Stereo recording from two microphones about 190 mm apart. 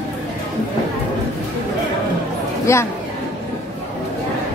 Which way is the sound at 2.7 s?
15° left (ahead or behind).